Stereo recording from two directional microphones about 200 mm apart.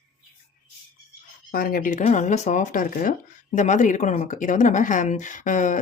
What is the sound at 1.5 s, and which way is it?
Speech, 45° left (ahead or behind).